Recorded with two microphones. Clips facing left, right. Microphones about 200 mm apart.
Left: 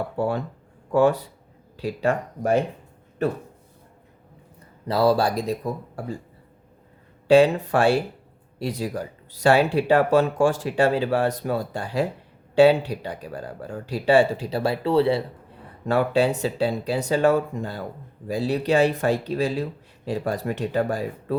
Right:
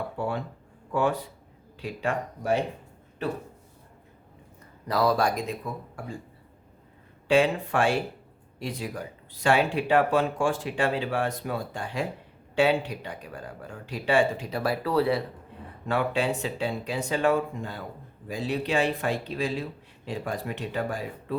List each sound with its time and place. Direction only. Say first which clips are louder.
1.7 s speech: left 6 dB; 40° left (ahead or behind)
4.9 s speech: left 4 dB; 30° left (ahead or behind)
7.3 s speech: left 6 dB; 35° left (ahead or behind)
15.9 s speech: left 6 dB; 40° left (ahead or behind)